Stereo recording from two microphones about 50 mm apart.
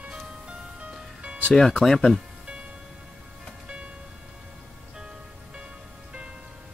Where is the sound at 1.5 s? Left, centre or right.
Centre.